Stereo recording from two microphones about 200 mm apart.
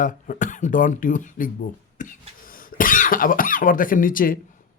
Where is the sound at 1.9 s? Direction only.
40° left (ahead or behind).